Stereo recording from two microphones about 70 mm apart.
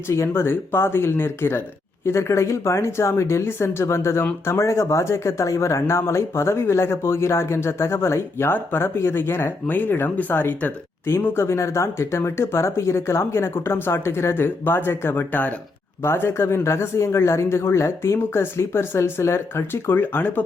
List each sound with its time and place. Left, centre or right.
0.1 s speech: left
16.0 s speech: left